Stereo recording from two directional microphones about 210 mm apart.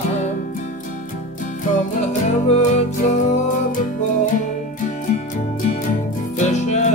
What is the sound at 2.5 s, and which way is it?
Music, 35° left (ahead or behind).